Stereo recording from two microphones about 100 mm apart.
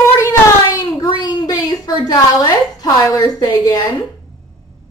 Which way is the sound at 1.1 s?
45° left (ahead or behind).